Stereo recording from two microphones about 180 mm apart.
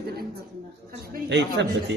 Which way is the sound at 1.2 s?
75° right (ahead or behind).